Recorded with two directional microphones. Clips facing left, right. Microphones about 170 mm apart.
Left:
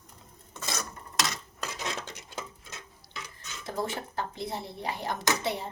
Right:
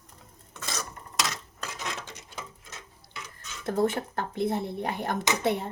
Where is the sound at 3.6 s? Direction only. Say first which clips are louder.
Right 7 dB; 55° right (ahead or behind).